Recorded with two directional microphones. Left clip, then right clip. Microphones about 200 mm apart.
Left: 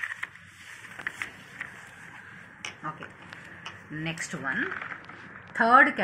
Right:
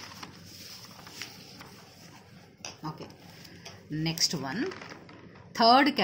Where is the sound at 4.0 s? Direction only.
85° right.